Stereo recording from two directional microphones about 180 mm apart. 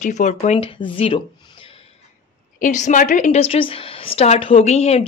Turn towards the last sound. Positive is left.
turn(degrees=35)  # may be behind; listen again after turning